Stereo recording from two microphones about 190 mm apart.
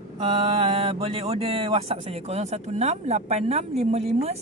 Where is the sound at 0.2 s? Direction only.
30° right (ahead or behind).